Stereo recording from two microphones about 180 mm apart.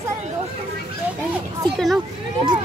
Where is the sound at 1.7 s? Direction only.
Centre (ahead or behind).